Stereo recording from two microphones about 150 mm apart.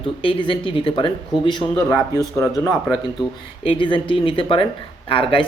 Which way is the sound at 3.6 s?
35° left (ahead or behind).